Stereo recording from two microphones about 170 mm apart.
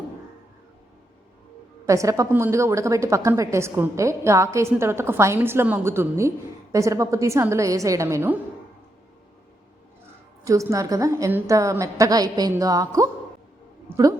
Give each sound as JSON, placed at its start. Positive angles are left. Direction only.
{"t": 1.9, "sound": "a woman's voice", "side_deg": -20}
{"t": 10.4, "sound": "a woman's voice", "side_deg": -20}